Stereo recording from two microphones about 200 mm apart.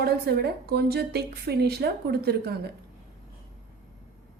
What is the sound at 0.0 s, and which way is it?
A woman's voice, 50° right (ahead or behind).